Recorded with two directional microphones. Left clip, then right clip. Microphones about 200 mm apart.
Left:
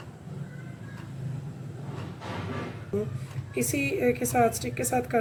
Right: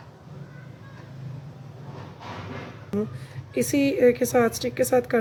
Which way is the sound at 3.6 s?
45° right (ahead or behind).